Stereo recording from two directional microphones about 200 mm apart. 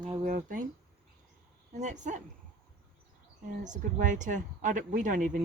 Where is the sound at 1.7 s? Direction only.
35° right (ahead or behind).